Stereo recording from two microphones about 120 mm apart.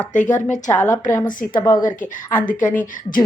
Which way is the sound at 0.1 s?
90° left.